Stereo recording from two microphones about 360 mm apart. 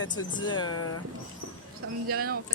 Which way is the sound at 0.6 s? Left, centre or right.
Left.